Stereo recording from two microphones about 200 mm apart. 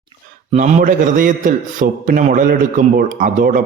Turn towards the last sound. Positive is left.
turn(degrees=-40)  # may be behind; listen again after turning